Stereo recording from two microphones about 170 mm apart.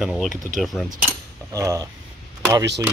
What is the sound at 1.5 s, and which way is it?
Speech, 20° right (ahead or behind).